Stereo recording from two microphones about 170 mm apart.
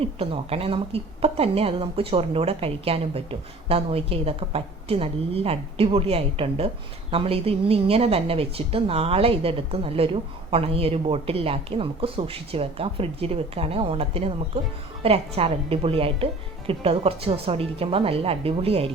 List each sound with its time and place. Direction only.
0.0 s a woman's voice: 35° right (ahead or behind)